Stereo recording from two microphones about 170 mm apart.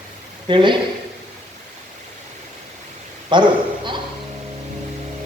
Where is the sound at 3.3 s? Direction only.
25° right (ahead or behind).